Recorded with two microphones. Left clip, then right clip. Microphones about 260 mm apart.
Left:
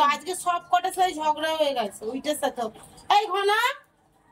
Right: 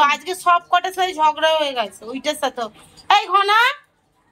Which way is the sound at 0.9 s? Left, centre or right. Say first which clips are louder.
Right 6 dB; centre.